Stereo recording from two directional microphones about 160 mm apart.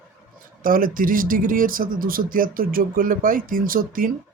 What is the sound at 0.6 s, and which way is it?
Speech, 60° right (ahead or behind).